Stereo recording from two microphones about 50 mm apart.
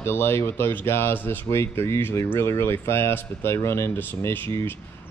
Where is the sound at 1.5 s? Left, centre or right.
Left.